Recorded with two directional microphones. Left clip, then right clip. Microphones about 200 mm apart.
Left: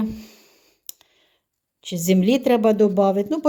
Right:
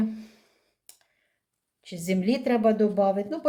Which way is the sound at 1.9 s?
45° left (ahead or behind).